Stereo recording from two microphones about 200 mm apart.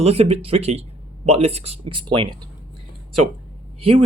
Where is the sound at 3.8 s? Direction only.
30° right (ahead or behind).